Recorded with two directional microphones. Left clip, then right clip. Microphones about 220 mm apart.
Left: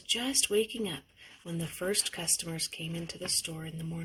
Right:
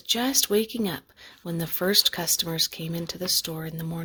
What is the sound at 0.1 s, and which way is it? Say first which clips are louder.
Speech: right 6 dB; 45° right (ahead or behind).